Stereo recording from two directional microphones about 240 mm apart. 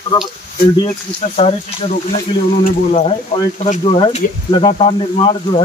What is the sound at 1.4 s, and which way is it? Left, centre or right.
Speech, left.